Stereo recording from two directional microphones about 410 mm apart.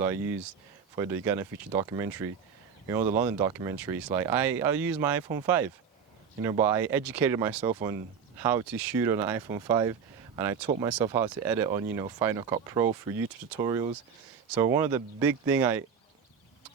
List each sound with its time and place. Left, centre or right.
0.9 s speech: centre